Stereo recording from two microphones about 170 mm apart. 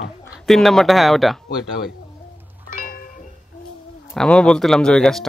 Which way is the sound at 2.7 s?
55° left (ahead or behind).